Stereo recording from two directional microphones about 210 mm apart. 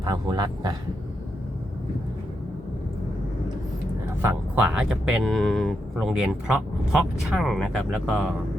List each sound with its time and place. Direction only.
0.0 s speech: 20° right (ahead or behind)
4.2 s speech: 10° right (ahead or behind)